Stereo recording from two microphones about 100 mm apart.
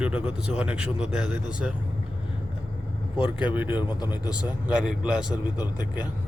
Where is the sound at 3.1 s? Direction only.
10° right (ahead or behind).